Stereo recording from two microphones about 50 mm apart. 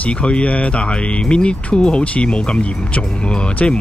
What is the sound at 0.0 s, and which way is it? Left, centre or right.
Speech, left.